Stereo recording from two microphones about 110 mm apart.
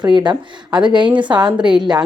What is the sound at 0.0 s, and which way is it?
A woman's voice, 40° right (ahead or behind).